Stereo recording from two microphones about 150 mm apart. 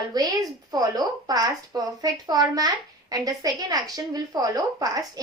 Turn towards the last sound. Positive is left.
turn(degrees=-25)  # may be behind; listen again after turning